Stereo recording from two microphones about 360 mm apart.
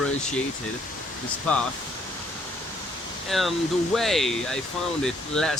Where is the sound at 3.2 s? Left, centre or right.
Centre.